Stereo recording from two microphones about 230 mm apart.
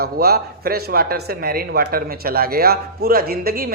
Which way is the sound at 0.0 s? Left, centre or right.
Right.